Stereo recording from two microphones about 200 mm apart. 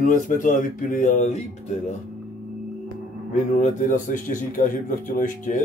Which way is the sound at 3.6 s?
40° left (ahead or behind).